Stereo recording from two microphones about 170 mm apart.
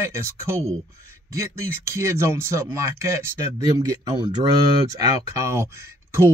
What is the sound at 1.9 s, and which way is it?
Speech, 15° right (ahead or behind).